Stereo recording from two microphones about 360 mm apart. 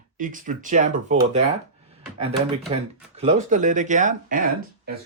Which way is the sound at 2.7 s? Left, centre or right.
Centre.